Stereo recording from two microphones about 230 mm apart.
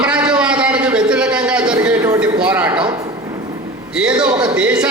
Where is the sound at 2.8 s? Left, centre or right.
Centre.